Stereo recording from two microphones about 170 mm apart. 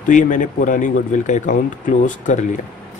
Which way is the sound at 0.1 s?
50° left (ahead or behind).